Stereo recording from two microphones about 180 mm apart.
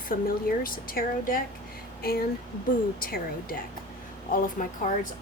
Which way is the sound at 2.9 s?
55° left (ahead or behind).